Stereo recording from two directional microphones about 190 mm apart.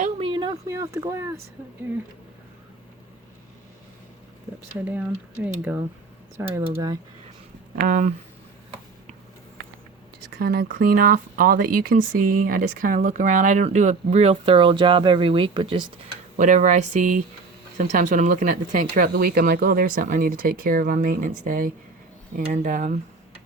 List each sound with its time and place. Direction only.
0.0 s a sound: 25° right (ahead or behind)
4.9 s speech: 10° right (ahead or behind)
7.8 s speech: 45° right (ahead or behind)
10.3 s speech: 55° right (ahead or behind); by 16.1 s 25° right (ahead or behind)
16.4 s speech: 40° right (ahead or behind)